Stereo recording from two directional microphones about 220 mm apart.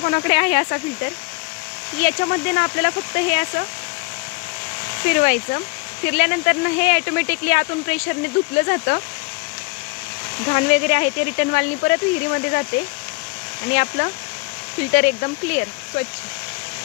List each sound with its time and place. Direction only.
0.0 s speech: 35° left (ahead or behind)
5.0 s speech: 40° left (ahead or behind)
10.5 s speech: 30° left (ahead or behind)
14.9 s speech: 35° left (ahead or behind)